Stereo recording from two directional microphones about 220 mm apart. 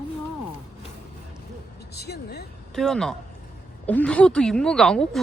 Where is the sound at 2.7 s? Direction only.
Centre (ahead or behind).